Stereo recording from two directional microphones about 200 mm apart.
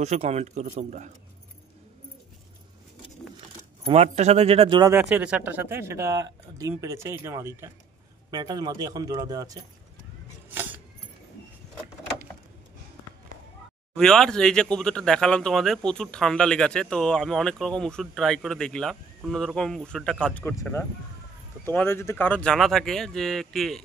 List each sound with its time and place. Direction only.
0.0 s speech: 35° right (ahead or behind)
3.8 s speech: 35° right (ahead or behind)
5.1 s speech: 5° right (ahead or behind)
10.5 s a sound: 10° right (ahead or behind)
13.9 s speech: 5° left (ahead or behind)